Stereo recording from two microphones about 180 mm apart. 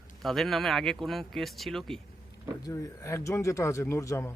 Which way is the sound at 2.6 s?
20° left (ahead or behind).